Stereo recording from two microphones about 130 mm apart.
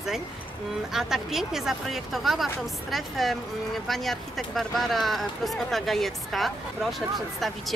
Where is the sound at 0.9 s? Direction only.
Centre (ahead or behind).